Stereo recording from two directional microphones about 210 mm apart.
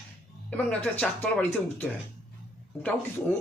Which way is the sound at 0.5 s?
5° left (ahead or behind).